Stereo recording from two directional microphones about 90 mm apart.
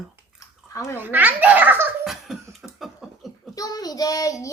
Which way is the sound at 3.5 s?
45° left (ahead or behind).